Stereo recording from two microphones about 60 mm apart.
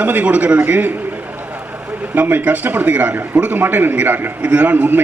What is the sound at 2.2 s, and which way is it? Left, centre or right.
A man's voice, right.